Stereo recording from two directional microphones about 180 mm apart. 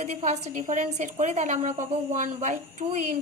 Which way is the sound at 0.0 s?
40° right (ahead or behind).